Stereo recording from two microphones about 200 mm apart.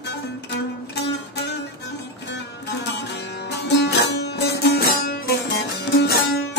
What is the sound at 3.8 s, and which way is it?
Music, 60° left (ahead or behind).